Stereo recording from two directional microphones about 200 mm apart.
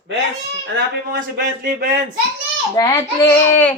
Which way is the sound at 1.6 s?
40° right (ahead or behind).